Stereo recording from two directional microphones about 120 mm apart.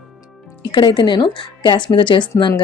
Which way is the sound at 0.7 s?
40° left (ahead or behind).